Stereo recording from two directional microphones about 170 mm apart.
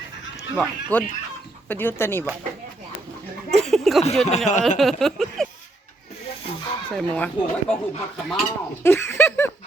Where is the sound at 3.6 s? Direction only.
Centre (ahead or behind).